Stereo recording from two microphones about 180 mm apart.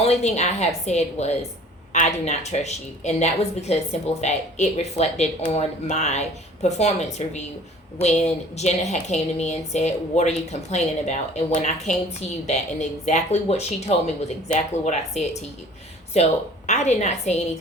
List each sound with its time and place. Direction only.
0.0 s a woman's voice: 35° left (ahead or behind)